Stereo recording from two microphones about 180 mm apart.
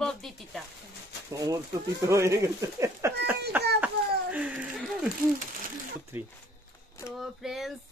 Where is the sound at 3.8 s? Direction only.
5° right (ahead or behind).